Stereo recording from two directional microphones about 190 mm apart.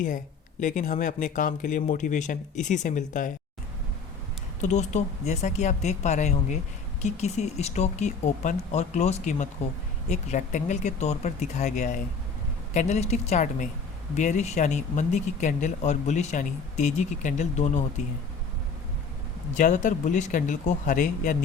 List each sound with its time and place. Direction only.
0.6 s speech: 45° left (ahead or behind)
4.6 s speech: 35° left (ahead or behind)
19.5 s speech: 40° left (ahead or behind)